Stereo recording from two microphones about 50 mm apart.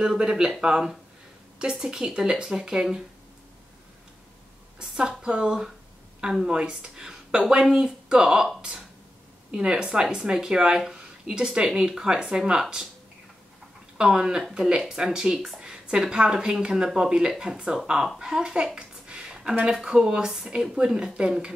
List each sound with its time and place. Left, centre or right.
0.0 s speech: centre
4.7 s speech: centre
13.9 s speech: centre
18.8 s a sound: centre
19.7 s speech: centre